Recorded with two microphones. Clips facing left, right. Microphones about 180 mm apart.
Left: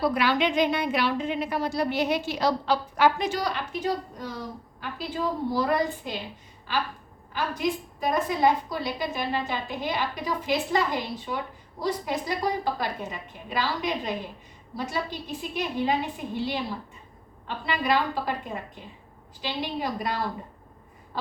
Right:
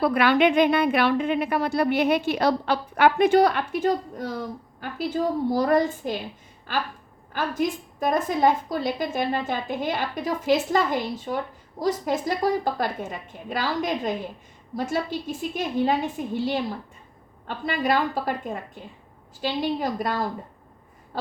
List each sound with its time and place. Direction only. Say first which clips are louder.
0.0 s a woman's voice: right 5 dB; 60° right (ahead or behind)
7.3 s a woman's voice: right 2 dB; 50° right (ahead or behind)